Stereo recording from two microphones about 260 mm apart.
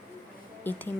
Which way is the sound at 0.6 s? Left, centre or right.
Centre.